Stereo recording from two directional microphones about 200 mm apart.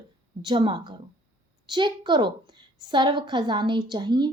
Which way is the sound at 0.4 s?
25° right (ahead or behind).